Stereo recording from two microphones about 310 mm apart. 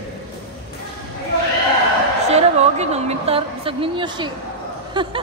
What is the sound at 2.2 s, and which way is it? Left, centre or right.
A woman's voice, right.